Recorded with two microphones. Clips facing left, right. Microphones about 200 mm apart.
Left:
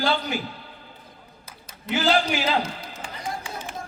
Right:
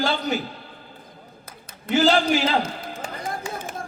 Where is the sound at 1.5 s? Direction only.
50° right (ahead or behind).